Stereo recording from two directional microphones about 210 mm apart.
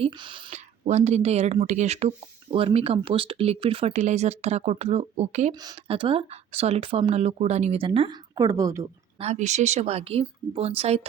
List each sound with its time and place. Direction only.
0.0 s a woman's voice: 25° right (ahead or behind)
9.1 s a woman's voice: 30° right (ahead or behind)